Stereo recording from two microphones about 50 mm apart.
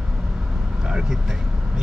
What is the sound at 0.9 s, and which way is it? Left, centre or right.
Speech, centre.